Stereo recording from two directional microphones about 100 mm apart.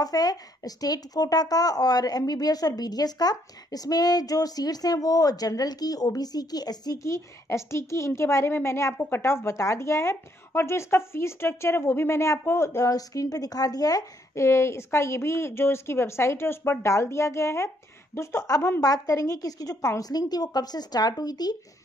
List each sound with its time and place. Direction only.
0.0 s a woman's voice: 40° left (ahead or behind)